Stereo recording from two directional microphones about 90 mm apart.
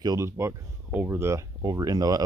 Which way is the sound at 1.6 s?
45° right (ahead or behind).